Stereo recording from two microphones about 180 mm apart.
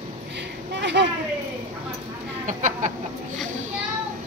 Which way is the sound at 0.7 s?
80° right.